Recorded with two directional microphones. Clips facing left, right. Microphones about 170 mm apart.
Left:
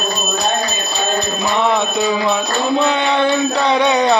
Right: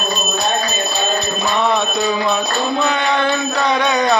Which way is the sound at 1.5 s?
20° left (ahead or behind).